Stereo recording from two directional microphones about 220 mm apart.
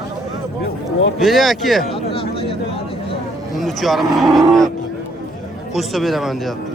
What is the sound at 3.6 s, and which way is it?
Speech, centre (ahead or behind).